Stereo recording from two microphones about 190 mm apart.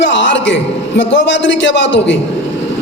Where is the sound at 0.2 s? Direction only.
75° left (ahead or behind).